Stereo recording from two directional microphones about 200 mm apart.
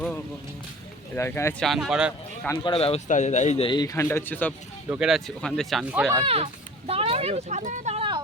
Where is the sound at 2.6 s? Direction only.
30° left (ahead or behind); by 4.5 s 10° left (ahead or behind).